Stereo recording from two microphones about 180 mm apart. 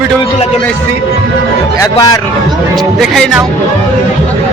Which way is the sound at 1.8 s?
20° left (ahead or behind).